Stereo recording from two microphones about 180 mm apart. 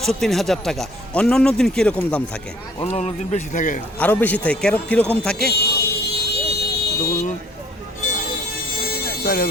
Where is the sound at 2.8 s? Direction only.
35° left (ahead or behind).